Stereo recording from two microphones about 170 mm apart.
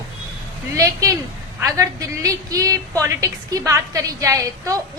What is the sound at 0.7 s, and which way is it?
A woman's voice, 20° right (ahead or behind).